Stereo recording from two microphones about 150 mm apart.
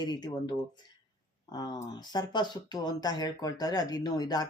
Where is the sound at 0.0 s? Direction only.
30° left (ahead or behind).